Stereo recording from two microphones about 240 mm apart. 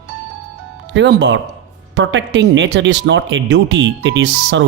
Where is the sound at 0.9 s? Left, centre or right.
Right.